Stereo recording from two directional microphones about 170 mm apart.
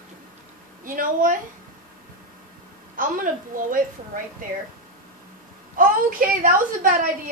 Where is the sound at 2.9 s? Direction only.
50° right (ahead or behind).